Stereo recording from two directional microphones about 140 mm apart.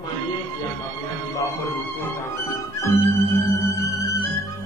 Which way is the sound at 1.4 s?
20° left (ahead or behind).